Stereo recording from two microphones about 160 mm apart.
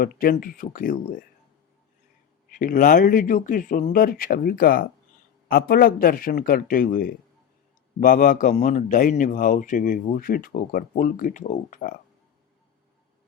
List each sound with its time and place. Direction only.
0.0 s speech: 65° left (ahead or behind)
2.5 s speech: 60° left (ahead or behind)